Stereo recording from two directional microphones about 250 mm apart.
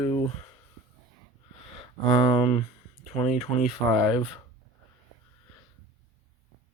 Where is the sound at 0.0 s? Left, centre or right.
Left.